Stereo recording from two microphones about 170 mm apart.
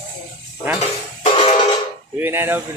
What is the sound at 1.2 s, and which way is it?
Music, 35° left (ahead or behind).